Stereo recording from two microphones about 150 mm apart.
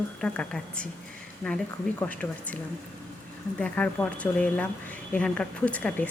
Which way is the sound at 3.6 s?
10° left (ahead or behind).